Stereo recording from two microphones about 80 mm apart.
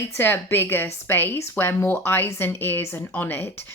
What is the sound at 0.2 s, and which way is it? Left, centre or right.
Speech, left.